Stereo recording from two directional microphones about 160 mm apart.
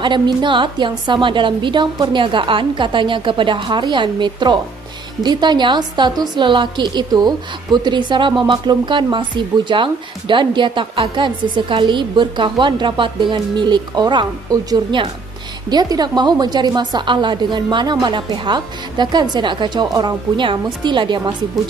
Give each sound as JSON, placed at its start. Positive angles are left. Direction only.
{"t": 0.0, "sound": "a woman's voice", "side_deg": -30}